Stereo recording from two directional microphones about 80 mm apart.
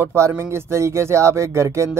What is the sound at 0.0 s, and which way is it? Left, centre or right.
Speech, right.